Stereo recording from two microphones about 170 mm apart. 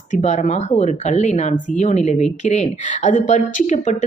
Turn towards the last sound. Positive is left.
turn(degrees=50)  # may be behind; listen again after turning